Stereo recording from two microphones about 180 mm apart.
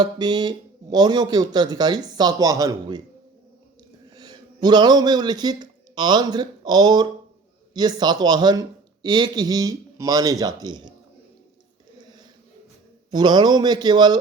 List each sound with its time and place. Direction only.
0.0 s speech: 25° right (ahead or behind)
4.1 s speech: 20° right (ahead or behind)
13.1 s speech: 25° right (ahead or behind)